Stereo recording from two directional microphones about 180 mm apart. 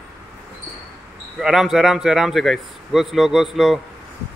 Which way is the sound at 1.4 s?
Centre (ahead or behind).